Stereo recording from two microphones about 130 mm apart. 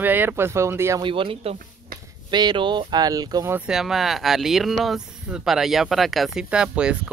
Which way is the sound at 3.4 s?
15° right (ahead or behind).